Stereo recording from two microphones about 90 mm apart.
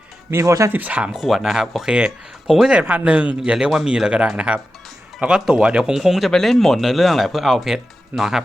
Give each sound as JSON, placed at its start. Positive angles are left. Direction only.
{"t": 0.3, "sound": "speech", "side_deg": -35}
{"t": 0.7, "sound": "speech", "side_deg": -15}
{"t": 1.1, "sound": "speech", "side_deg": -5}